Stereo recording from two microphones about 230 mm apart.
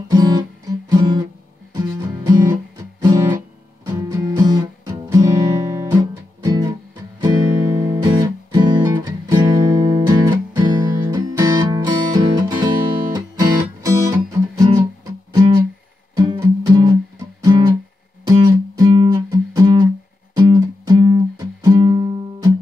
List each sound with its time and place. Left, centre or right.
0.1 s music: centre
4.5 s music: centre
15.3 s guitar: centre
16.2 s music: centre